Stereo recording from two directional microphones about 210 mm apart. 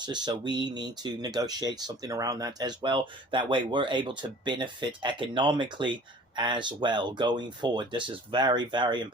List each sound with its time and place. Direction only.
0.0 s speech: 20° right (ahead or behind)